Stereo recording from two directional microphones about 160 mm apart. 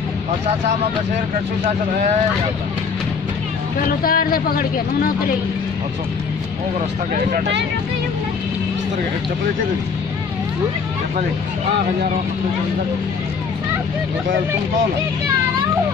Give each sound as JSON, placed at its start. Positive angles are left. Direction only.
{"t": 4.0, "sound": "a man's voice", "side_deg": 65}
{"t": 7.3, "sound": "speech", "side_deg": -90}